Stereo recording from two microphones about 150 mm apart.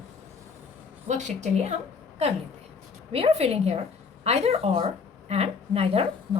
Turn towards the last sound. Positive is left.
turn(degrees=-40)  # may be behind; listen again after turning